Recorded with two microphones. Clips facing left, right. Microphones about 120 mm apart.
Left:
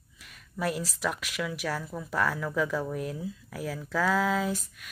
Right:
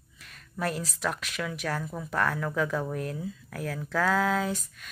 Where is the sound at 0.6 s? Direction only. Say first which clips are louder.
Even; 5° left (ahead or behind).